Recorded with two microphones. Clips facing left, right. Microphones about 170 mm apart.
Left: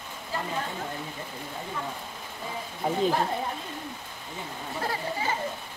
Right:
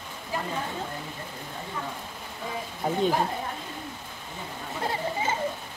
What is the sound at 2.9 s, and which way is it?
Speech, centre (ahead or behind).